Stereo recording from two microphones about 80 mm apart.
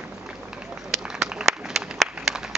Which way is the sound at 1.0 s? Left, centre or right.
Centre.